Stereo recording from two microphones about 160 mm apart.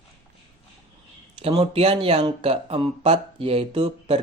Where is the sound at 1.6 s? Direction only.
40° right (ahead or behind).